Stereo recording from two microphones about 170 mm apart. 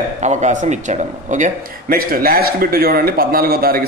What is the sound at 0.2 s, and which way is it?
A man's voice, 45° right (ahead or behind).